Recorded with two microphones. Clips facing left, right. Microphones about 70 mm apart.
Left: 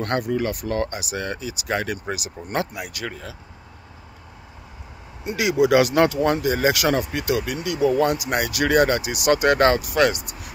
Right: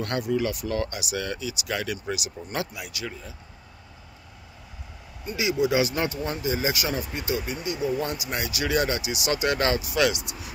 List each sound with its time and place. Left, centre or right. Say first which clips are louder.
0.0 s speech: left 3 dB; left
5.2 s speech: left 5 dB; left